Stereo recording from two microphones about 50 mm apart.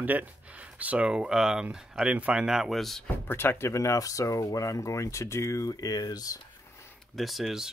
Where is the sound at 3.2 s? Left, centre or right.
Left.